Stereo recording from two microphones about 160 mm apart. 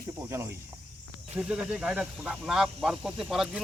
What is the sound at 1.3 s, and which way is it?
Speech, 5° right (ahead or behind).